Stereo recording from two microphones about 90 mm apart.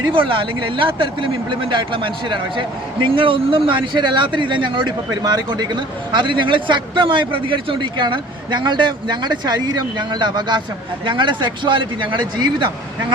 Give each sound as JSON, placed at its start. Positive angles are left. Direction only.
{"t": 0.1, "sound": "speech", "side_deg": -75}
{"t": 3.7, "sound": "speech", "side_deg": -60}